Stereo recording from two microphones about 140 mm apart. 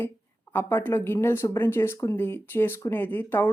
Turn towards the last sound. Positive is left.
turn(degrees=15)  # may be behind; listen again after turning